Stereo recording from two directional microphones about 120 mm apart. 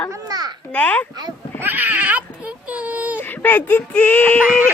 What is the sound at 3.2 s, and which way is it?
Speech, 15° left (ahead or behind).